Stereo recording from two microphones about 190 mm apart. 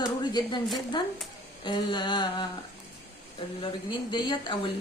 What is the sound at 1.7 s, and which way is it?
Speech, 25° left (ahead or behind).